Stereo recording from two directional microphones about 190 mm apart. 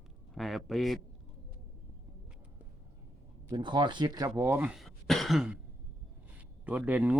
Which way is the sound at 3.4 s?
25° right (ahead or behind).